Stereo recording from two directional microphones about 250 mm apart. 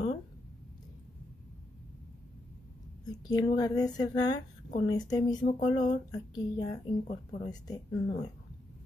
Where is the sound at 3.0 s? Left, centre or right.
Centre.